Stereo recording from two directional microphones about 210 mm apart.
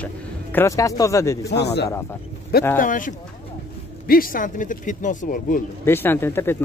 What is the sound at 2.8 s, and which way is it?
A man's voice, 40° left (ahead or behind).